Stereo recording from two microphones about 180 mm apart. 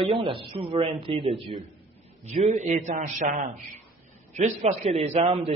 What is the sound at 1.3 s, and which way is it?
Speech, centre (ahead or behind).